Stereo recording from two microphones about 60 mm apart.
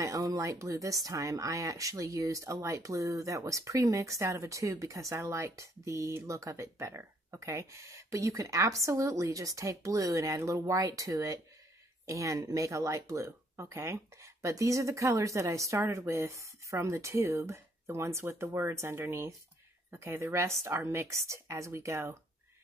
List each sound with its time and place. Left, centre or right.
0.0 s speech: right